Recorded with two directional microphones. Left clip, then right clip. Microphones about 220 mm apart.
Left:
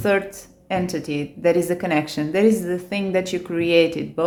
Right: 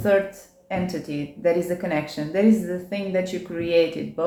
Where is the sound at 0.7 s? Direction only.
40° left (ahead or behind).